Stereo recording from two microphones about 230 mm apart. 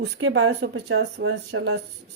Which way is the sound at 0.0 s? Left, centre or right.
Right.